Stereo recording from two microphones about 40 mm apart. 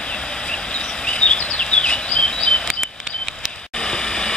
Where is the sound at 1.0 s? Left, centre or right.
Left.